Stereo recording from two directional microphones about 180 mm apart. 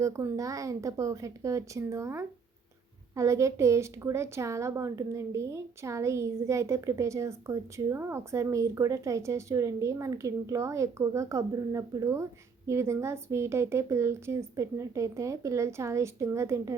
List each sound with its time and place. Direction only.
0.0 s a woman's voice: 20° right (ahead or behind)